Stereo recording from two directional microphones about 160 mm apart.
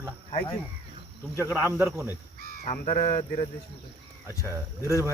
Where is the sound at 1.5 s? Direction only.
15° right (ahead or behind).